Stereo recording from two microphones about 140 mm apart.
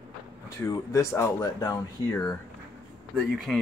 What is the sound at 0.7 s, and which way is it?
Speech, 20° left (ahead or behind).